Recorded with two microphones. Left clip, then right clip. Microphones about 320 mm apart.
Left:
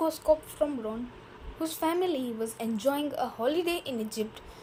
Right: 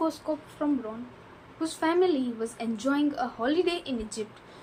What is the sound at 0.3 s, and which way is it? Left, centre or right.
Speech, left.